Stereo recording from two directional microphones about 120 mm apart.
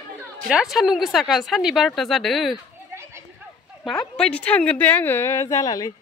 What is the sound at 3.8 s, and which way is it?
A woman's voice, 5° left (ahead or behind).